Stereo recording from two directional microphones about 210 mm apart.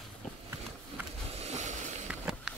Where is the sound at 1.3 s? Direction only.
35° right (ahead or behind).